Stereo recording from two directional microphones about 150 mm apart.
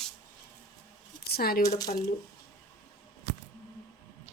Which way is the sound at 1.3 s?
90° left.